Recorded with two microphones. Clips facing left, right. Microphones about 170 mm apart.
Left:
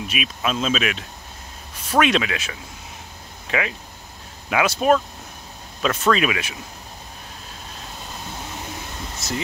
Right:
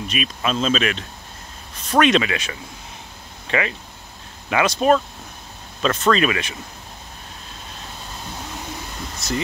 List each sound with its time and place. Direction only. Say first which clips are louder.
0.0 s speech: right 1 dB; 5° left (ahead or behind)
9.2 s speech: right 3 dB; centre (ahead or behind)